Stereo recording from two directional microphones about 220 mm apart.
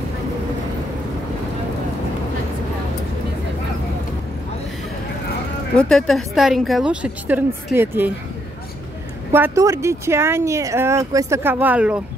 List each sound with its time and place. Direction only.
5.8 s a woman's voice: centre (ahead or behind)
9.3 s speech: 10° right (ahead or behind)